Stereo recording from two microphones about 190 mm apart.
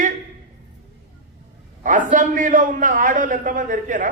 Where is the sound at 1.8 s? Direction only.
45° right (ahead or behind).